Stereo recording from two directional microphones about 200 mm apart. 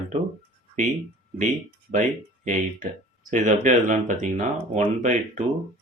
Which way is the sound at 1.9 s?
40° right (ahead or behind).